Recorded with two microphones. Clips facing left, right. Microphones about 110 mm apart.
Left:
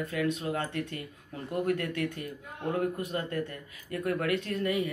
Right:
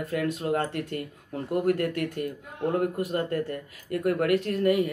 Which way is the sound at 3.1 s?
40° right (ahead or behind).